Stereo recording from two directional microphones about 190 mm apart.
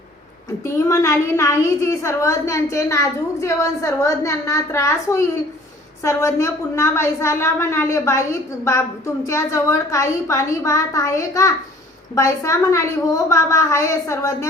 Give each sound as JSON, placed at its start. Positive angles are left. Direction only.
{"t": 0.6, "sound": "a woman's voice", "side_deg": 15}